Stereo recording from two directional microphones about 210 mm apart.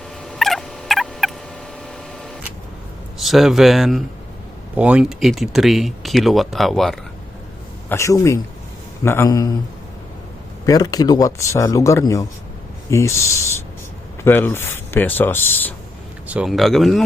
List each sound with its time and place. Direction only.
0.3 s fowl: centre (ahead or behind)
3.2 s speech: centre (ahead or behind)
7.9 s speech: 15° left (ahead or behind)
10.7 s speech: 20° left (ahead or behind)
16.2 s speech: 5° right (ahead or behind)